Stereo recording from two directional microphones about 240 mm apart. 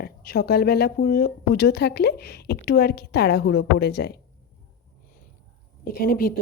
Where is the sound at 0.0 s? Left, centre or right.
Left.